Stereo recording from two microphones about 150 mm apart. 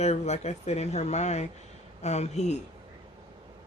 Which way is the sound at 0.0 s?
45° left (ahead or behind).